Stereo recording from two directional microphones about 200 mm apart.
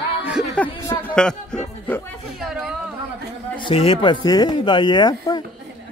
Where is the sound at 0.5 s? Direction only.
10° left (ahead or behind).